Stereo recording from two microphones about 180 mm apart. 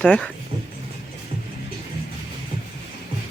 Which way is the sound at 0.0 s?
5° left (ahead or behind).